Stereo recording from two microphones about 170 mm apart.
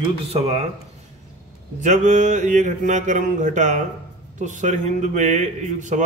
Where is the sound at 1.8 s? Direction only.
45° right (ahead or behind).